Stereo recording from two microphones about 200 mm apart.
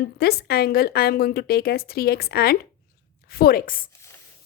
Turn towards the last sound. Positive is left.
turn(degrees=45)  # may be behind; listen again after turning